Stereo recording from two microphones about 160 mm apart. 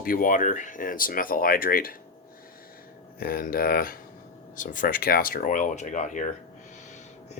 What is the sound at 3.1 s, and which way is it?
Speech, 65° left (ahead or behind).